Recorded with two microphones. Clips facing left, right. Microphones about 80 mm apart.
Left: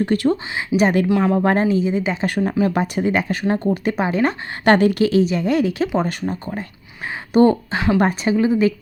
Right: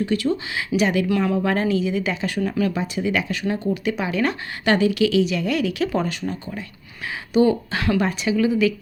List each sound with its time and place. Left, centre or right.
0.0 s a woman's voice: left
1.0 s a woman's voice: left
2.7 s speech: left
3.1 s a woman's voice: left
4.6 s a woman's voice: left
7.7 s speech: left
7.9 s a woman's voice: left